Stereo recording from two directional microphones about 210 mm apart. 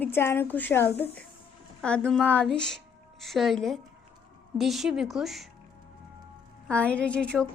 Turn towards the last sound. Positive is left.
turn(degrees=5)  # may be behind; listen again after turning